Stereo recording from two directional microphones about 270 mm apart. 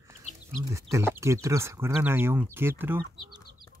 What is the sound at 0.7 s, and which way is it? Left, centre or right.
Speech, centre.